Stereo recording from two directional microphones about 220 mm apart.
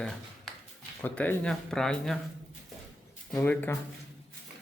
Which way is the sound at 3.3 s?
10° left (ahead or behind).